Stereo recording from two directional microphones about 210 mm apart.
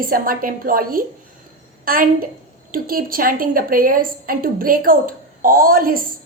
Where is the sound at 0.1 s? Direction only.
40° right (ahead or behind).